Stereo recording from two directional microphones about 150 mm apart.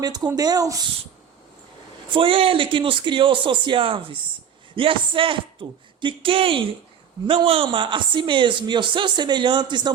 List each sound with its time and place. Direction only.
0.0 s speech: 25° right (ahead or behind)
2.1 s a man's voice: 35° right (ahead or behind)